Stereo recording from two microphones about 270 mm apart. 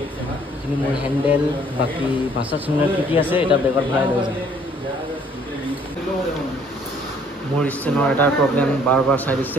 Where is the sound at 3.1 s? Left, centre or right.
Centre.